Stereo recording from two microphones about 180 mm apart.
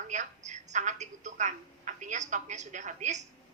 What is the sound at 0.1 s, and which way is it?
A woman's voice, 40° right (ahead or behind).